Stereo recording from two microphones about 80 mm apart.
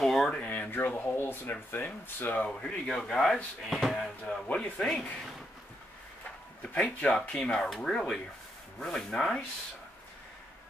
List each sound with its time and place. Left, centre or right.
0.0 s a sound: centre
0.5 s speech: left; by 5.3 s centre
6.7 s speech: centre